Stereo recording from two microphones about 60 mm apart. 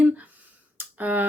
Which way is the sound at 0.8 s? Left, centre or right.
Right.